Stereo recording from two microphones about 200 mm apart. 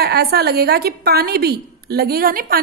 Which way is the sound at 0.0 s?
50° right (ahead or behind).